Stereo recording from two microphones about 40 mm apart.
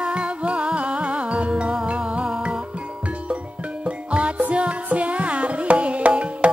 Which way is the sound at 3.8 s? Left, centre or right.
Right.